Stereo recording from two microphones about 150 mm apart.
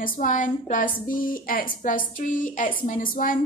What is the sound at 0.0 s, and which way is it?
A woman's voice, 65° left (ahead or behind).